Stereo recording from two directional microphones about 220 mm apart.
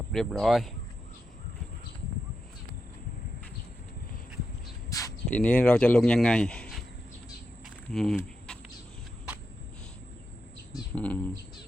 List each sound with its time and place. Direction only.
0.1 s speech: centre (ahead or behind)
4.9 s a sound: 15° left (ahead or behind)
5.4 s speech: 5° left (ahead or behind)
7.9 s speech: centre (ahead or behind)
10.9 s speech: 5° left (ahead or behind)